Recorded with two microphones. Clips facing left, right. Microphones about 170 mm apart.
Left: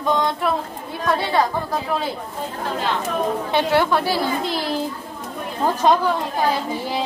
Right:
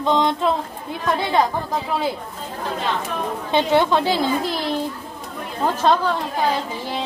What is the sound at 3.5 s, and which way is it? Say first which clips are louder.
Speech: right 2 dB; 20° right (ahead or behind).